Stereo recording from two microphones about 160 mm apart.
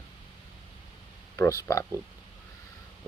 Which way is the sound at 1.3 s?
20° left (ahead or behind).